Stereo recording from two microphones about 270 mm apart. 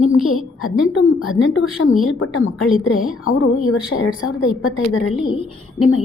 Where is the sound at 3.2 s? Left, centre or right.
Left.